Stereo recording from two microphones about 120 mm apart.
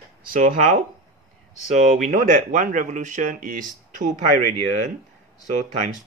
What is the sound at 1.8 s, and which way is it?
Speech, 90° right.